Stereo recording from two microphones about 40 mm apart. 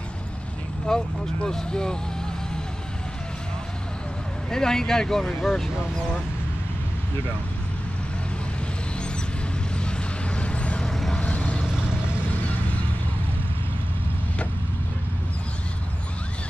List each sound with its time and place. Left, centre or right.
0.8 s speech: centre
4.5 s speech: centre
9.8 s vehicle: left
10.9 s vehicle: centre
11.1 s vehicle: left